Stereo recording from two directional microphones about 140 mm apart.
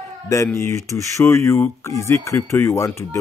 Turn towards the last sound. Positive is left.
turn(degrees=20)  # may be behind; listen again after turning